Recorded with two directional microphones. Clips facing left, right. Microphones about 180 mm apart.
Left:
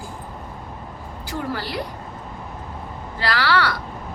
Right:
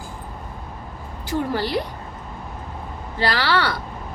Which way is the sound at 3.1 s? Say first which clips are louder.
Even; 25° right (ahead or behind).